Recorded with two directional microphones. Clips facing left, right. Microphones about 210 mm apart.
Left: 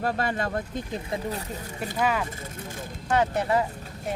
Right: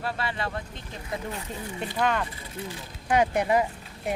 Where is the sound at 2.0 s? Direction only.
5° left (ahead or behind).